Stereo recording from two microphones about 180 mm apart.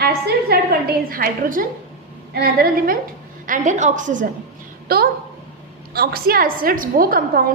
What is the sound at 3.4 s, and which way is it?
Speech, 45° right (ahead or behind).